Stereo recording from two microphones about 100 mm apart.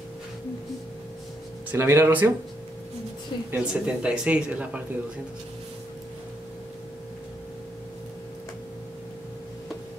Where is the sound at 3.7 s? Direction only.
10° right (ahead or behind).